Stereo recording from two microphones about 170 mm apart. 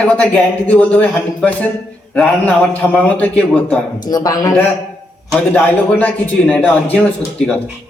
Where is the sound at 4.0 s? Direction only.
20° left (ahead or behind).